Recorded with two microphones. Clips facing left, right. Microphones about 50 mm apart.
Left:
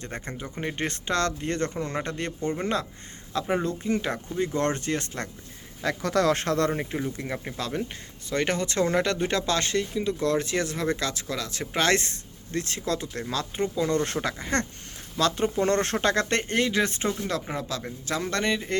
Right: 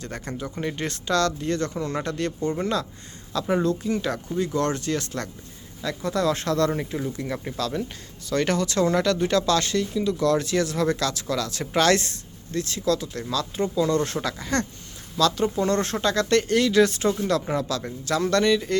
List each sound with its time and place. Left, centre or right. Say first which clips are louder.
0.0 s speech: right 3 dB; left
5.8 s speech: left 1 dB; left; by 11.9 s centre
11.9 s speech: right 3 dB; left
16.4 s speech: right 5 dB; left
17.2 s speech: right 6 dB; centre